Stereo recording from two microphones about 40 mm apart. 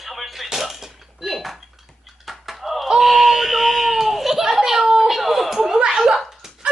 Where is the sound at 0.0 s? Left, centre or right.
Centre.